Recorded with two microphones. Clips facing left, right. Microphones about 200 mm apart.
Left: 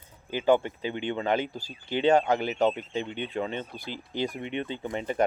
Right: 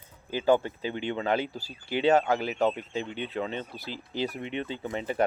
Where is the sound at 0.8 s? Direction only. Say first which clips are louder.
Left 1 dB; 40° right (ahead or behind).